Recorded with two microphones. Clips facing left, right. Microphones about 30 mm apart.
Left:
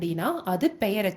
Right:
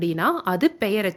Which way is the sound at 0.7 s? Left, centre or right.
Centre.